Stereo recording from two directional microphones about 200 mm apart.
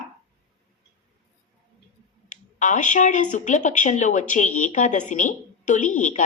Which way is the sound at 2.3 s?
40° left (ahead or behind).